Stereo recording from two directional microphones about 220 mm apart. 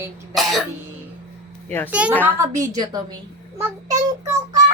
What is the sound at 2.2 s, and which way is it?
Speech, 15° right (ahead or behind).